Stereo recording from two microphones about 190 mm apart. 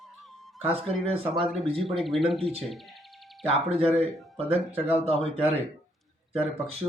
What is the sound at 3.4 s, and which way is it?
Speech, 30° right (ahead or behind).